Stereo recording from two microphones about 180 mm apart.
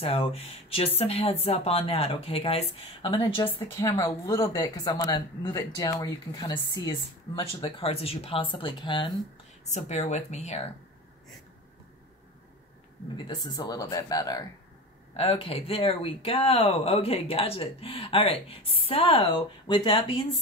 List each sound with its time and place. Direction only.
0.0 s speech: 35° left (ahead or behind)
3.8 s speech: 15° left (ahead or behind)
9.7 s speech: 40° left (ahead or behind)
13.1 s speech: 25° left (ahead or behind)